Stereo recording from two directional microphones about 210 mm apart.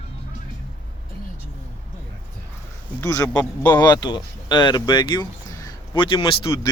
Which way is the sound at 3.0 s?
15° left (ahead or behind).